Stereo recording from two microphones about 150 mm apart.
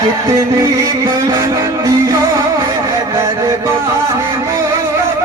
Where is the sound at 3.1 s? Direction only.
20° right (ahead or behind).